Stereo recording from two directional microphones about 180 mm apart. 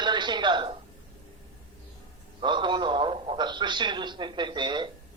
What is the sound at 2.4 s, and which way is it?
A man's voice, 25° right (ahead or behind).